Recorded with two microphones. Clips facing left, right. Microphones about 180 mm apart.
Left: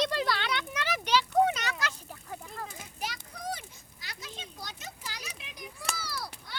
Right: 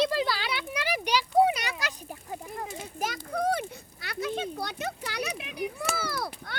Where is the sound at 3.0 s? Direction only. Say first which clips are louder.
Right 10 dB; 55° right (ahead or behind).